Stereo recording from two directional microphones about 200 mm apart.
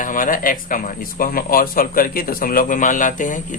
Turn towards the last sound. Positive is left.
turn(degrees=40)  # may be behind; listen again after turning